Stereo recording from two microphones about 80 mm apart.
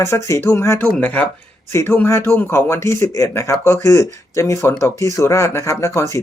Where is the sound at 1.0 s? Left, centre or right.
Left.